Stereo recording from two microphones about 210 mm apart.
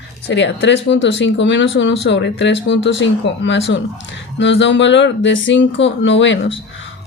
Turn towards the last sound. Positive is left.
turn(degrees=65)  # may be behind; listen again after turning